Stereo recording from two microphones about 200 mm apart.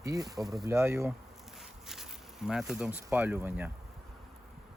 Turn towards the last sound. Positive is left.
turn(degrees=-10)  # may be behind; listen again after turning